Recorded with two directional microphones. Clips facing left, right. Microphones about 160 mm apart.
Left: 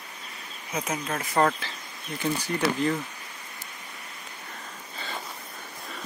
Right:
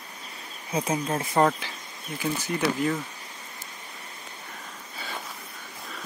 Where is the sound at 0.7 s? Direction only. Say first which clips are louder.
Right 4 dB; 30° right (ahead or behind).